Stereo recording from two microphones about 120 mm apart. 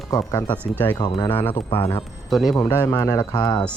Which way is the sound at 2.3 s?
Centre (ahead or behind).